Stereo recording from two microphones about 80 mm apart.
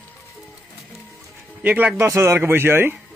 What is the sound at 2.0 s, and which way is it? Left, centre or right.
Speech, right.